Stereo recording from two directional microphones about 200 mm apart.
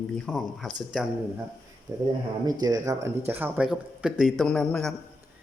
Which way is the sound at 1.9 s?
15° right (ahead or behind).